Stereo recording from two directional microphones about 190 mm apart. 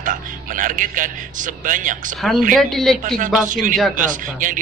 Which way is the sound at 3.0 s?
45° right (ahead or behind).